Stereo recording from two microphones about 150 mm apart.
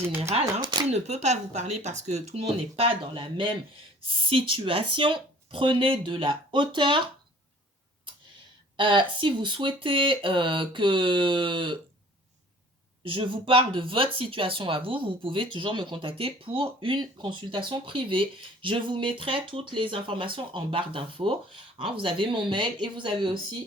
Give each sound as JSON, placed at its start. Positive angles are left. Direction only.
{"t": 0.2, "sound": "speech", "side_deg": -45}
{"t": 0.6, "sound": "speech", "side_deg": -30}
{"t": 0.9, "sound": "speech", "side_deg": -45}
{"t": 8.7, "sound": "speech", "side_deg": -35}
{"t": 13.1, "sound": "speech", "side_deg": -35}